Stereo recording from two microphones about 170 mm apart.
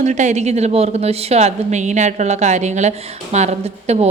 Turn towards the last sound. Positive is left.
turn(degrees=-40)  # may be behind; listen again after turning